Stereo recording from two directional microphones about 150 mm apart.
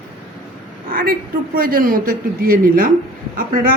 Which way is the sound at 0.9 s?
75° right (ahead or behind).